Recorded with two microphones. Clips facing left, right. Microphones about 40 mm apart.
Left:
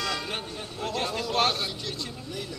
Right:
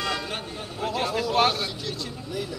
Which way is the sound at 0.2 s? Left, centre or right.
Centre.